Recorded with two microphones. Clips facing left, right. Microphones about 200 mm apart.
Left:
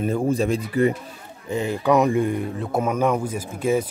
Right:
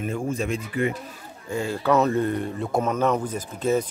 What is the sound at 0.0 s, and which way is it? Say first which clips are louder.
Speech: left 6 dB; 35° left (ahead or behind).